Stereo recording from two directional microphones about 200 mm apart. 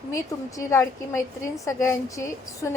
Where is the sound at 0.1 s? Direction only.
15° left (ahead or behind).